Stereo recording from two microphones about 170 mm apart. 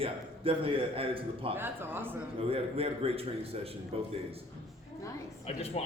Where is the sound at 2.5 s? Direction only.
35° right (ahead or behind).